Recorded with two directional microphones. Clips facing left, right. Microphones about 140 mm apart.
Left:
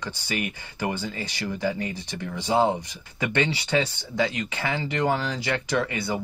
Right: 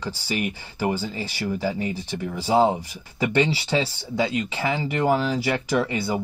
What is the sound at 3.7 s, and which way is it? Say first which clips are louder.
Speech: even; 25° right (ahead or behind).